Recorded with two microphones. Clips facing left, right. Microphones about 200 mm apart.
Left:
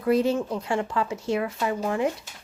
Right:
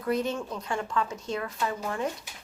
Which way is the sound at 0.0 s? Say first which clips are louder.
Left 6 dB; 30° left (ahead or behind).